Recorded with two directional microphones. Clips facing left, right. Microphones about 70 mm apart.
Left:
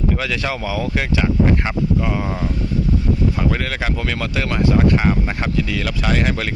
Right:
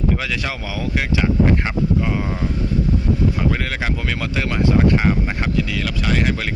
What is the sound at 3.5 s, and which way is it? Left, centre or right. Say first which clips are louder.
Speech: left 1 dB; centre.